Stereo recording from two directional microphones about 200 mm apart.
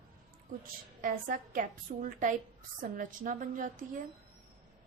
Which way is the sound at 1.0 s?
45° right (ahead or behind).